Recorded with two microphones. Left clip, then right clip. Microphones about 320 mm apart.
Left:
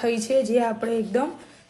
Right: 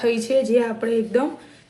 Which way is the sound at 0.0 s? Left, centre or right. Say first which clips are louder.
Right 2 dB; left.